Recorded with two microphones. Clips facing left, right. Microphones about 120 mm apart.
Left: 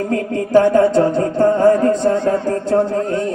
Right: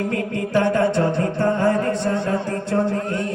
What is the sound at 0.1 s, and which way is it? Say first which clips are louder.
Music: left 7 dB; 35° left (ahead or behind).